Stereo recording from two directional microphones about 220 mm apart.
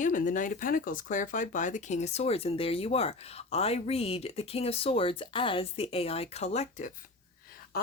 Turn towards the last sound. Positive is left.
turn(degrees=30)  # may be behind; listen again after turning